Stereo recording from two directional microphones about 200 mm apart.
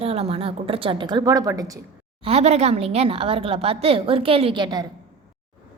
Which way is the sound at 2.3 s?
30° right (ahead or behind).